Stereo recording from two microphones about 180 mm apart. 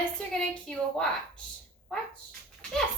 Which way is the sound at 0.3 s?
5° left (ahead or behind).